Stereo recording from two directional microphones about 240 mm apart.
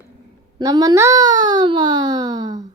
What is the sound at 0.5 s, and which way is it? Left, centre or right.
A child's voice, centre.